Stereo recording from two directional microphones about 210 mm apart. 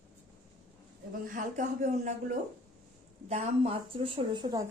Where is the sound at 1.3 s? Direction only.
40° right (ahead or behind).